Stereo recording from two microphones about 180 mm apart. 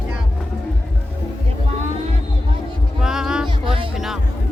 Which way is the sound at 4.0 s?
Centre (ahead or behind).